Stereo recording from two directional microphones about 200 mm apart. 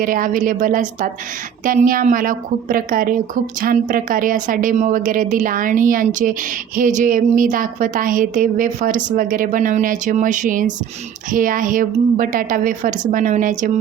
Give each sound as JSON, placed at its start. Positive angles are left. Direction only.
{"t": 0.0, "sound": "a woman's voice", "side_deg": -45}